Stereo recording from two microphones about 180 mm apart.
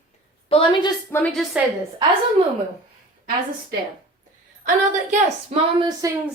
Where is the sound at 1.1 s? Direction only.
5° left (ahead or behind).